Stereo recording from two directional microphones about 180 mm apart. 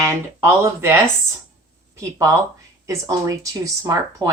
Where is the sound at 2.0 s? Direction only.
15° right (ahead or behind).